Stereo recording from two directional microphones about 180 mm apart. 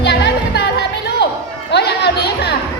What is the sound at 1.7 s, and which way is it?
Chatter, 65° left (ahead or behind).